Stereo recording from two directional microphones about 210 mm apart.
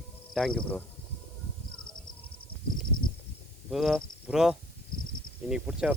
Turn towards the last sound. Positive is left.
turn(degrees=-5)  # may be behind; listen again after turning